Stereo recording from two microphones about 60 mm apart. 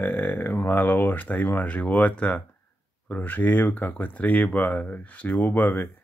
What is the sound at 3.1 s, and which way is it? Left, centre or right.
Speech, left.